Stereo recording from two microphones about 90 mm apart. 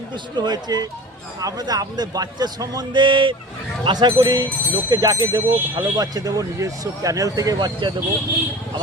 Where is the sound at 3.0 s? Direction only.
65° right (ahead or behind).